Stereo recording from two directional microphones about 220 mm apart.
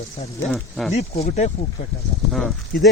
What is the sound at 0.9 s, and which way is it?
Speech, 30° left (ahead or behind).